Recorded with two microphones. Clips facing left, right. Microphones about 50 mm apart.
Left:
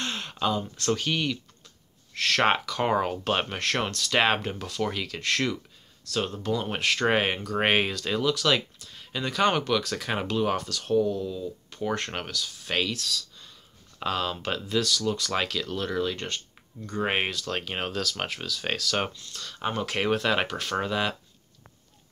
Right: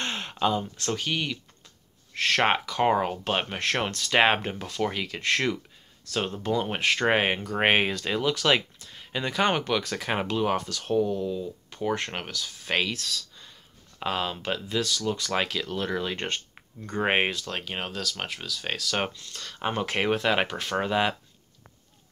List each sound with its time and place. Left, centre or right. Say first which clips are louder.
0.0 s speech: right 2 dB; centre
2.1 s speech: even; centre
10.9 s speech: even; right
12.9 s speech: left 1 dB; right
13.4 s speech: even; centre
16.2 s speech: right 3 dB; right
17.5 s speech: left 2 dB; centre
19.1 s speech: even; right
19.7 s speech: right 1 dB; right